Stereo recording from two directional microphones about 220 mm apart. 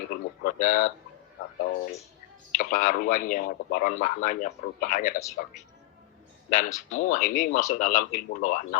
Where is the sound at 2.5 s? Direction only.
35° left (ahead or behind).